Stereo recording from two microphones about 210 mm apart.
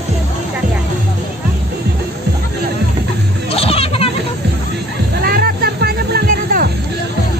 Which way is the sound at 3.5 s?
30° left (ahead or behind).